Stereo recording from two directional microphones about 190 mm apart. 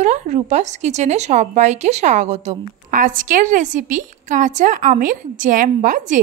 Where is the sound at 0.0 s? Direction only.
40° right (ahead or behind).